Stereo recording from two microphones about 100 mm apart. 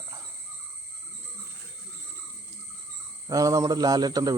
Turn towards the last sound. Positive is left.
turn(degrees=-40)  # may be behind; listen again after turning